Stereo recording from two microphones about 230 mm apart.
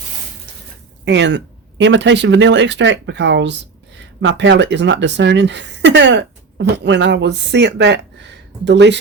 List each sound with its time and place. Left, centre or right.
1.0 s speech: right